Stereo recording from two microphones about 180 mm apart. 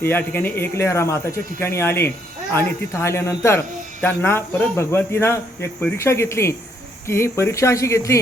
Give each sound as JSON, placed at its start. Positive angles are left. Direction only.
{"t": 0.0, "sound": "speech", "side_deg": 10}